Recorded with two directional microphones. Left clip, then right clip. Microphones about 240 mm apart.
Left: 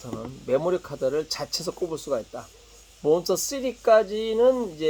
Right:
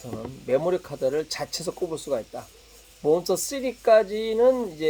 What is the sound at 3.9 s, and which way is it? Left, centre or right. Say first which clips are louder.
Speech: even; centre.